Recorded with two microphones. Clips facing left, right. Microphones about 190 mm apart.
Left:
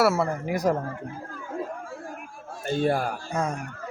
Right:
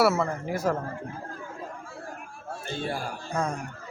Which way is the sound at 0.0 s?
10° left (ahead or behind).